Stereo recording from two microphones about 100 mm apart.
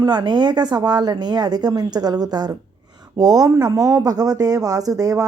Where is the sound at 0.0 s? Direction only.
50° right (ahead or behind).